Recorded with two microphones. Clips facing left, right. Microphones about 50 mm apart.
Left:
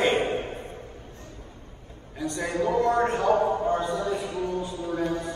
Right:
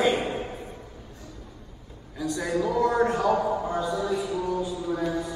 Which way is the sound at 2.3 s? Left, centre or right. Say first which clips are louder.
Left 1 dB; left.